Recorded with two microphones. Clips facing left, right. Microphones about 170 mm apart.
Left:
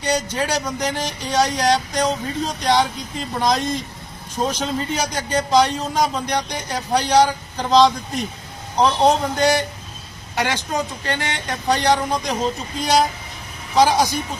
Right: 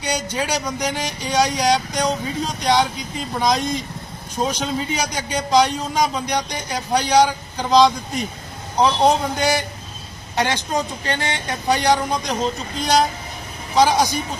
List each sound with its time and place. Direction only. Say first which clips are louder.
0.0 s a man's voice: left 2 dB; centre (ahead or behind)
10.3 s a woman's voice: right 1 dB; 20° right (ahead or behind)
11.7 s a man's voice: even; centre (ahead or behind)